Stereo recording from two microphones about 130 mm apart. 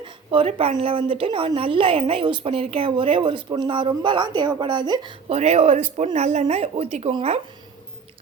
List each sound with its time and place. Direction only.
0.0 s a woman's voice: 45° right (ahead or behind)
5.4 s a woman's voice: 60° right (ahead or behind)